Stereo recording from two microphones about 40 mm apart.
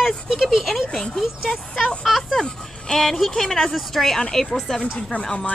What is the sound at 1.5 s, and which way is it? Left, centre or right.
Speech, centre.